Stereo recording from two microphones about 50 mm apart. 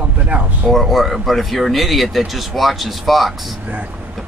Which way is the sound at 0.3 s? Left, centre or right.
Right.